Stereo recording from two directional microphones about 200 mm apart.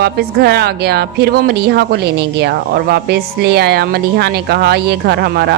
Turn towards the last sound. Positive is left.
turn(degrees=-55)  # may be behind; listen again after turning